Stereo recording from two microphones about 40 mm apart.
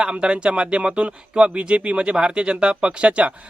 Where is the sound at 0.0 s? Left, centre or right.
Right.